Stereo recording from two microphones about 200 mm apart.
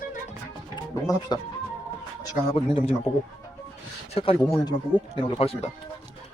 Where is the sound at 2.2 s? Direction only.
20° left (ahead or behind).